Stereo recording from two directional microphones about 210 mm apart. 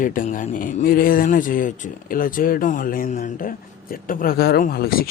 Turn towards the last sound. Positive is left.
turn(degrees=45)  # may be behind; listen again after turning